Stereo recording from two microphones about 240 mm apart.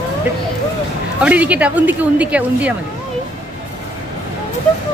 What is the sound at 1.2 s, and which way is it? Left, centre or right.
A woman's voice, centre.